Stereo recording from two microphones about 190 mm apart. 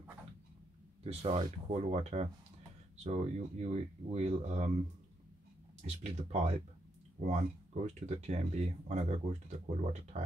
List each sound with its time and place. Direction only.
1.0 s speech: 35° right (ahead or behind)
5.9 s speech: 35° right (ahead or behind)